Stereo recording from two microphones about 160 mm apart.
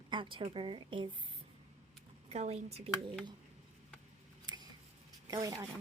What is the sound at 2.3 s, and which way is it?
Speech, 40° right (ahead or behind).